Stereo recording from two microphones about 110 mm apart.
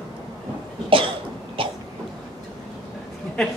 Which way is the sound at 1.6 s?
55° right (ahead or behind).